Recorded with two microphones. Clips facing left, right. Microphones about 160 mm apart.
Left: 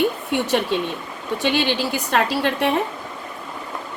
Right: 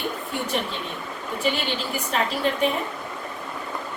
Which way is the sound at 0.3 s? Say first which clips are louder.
Left 7 dB; 85° left.